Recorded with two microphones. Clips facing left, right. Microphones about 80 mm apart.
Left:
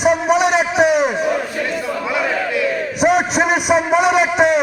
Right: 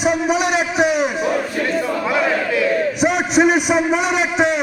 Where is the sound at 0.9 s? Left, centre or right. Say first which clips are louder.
Left 3 dB; left.